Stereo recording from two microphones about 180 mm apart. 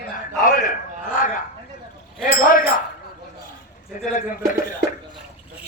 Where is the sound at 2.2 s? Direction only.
50° left (ahead or behind).